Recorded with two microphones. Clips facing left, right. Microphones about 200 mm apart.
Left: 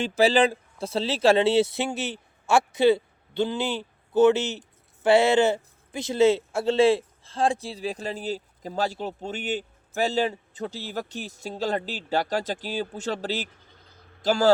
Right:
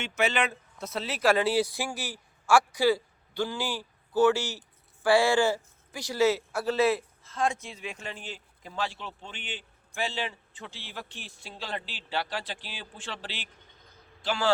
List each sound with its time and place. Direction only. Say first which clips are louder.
0.2 s a man's voice: left 8 dB; 30° left (ahead or behind)